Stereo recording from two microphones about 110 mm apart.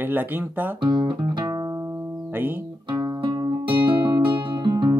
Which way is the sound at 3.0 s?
40° right (ahead or behind).